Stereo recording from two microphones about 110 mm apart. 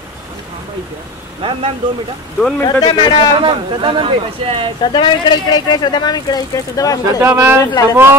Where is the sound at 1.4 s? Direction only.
55° right (ahead or behind).